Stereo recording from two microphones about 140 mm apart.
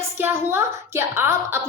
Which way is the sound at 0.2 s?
15° right (ahead or behind).